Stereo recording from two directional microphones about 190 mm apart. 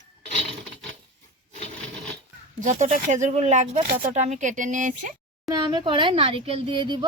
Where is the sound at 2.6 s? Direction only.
40° right (ahead or behind).